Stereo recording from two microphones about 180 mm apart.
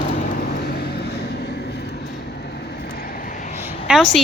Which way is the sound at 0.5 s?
60° left (ahead or behind).